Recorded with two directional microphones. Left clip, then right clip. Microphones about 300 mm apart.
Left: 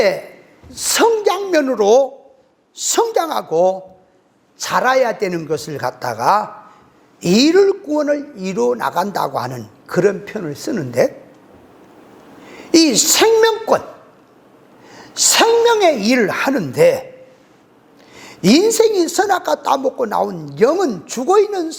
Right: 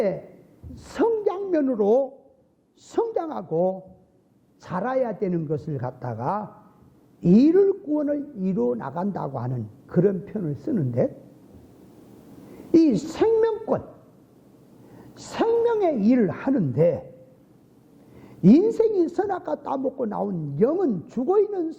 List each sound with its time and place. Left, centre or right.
0.0 s a woman's voice: centre
4.5 s a man's voice: centre
7.6 s a sound: centre
7.9 s a man's voice: centre
12.5 s a woman's voice: centre
18.1 s a woman's voice: centre
19.8 s a man's voice: centre
20.1 s a man's voice: centre